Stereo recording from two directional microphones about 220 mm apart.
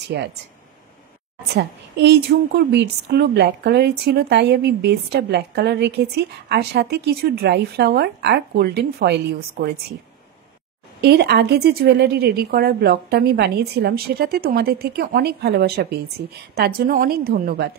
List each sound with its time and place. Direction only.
0.0 s speech: 50° right (ahead or behind)
1.5 s a woman's voice: 50° right (ahead or behind)
11.0 s a woman's voice: 50° right (ahead or behind)